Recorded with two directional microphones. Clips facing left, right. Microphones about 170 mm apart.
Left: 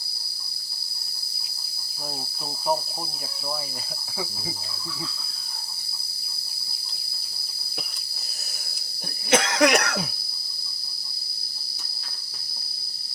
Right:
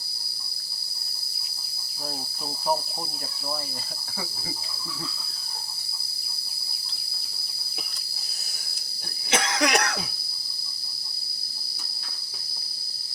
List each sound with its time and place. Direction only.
9.3 s cough: 55° left (ahead or behind)